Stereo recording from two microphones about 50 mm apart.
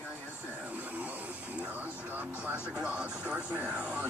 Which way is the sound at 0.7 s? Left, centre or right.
Right.